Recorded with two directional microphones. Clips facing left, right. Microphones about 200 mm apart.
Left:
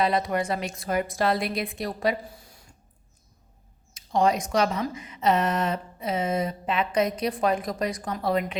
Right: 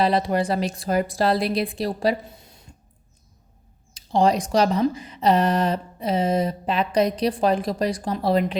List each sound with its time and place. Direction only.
0.0 s speech: 30° right (ahead or behind)
3.9 s speech: 30° right (ahead or behind)